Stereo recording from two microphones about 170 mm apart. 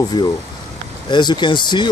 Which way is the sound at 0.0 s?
25° left (ahead or behind).